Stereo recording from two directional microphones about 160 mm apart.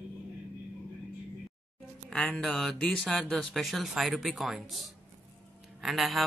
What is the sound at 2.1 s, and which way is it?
Speech, 5° left (ahead or behind).